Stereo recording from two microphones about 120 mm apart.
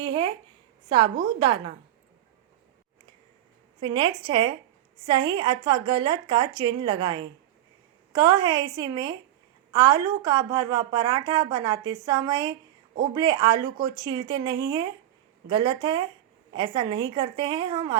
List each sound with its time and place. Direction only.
0.0 s a sound: 40° right (ahead or behind)
0.9 s a woman's voice: 40° right (ahead or behind)
3.8 s a woman's voice: 45° right (ahead or behind)